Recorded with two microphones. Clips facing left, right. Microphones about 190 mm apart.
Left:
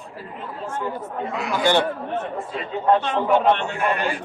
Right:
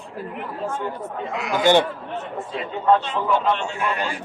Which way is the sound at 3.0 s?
60° left (ahead or behind).